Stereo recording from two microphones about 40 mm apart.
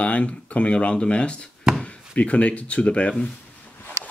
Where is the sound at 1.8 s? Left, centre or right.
Left.